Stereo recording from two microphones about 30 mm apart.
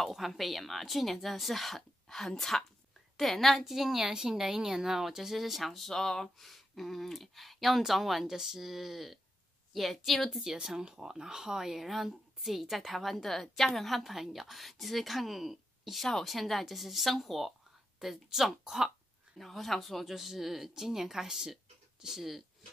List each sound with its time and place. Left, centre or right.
0.1 s speech: centre
2.1 s a woman's voice: centre
3.6 s speech: centre
5.9 s speech: centre
10.4 s speech: centre
11.7 s speech: centre
19.3 s speech: centre